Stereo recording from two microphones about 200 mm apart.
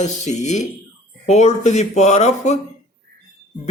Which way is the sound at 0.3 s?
35° left (ahead or behind).